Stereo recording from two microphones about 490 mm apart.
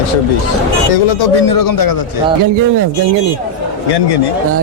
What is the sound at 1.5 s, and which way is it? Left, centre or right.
Speech, left.